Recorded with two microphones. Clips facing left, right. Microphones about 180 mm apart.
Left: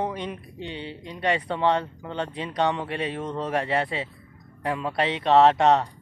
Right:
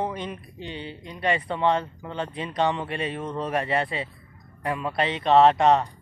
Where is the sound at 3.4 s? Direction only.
15° right (ahead or behind).